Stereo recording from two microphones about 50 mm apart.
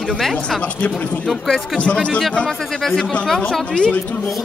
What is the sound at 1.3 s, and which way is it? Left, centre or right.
Speech, centre.